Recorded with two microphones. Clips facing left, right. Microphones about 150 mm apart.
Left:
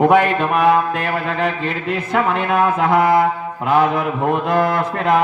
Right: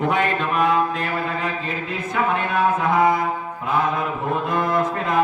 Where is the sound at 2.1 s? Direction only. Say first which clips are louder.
Left 4 dB; 75° left (ahead or behind).